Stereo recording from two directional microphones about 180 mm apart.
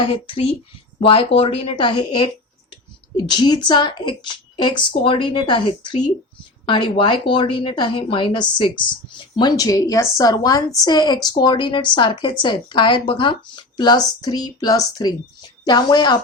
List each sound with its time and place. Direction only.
0.0 s a woman's voice: 30° left (ahead or behind)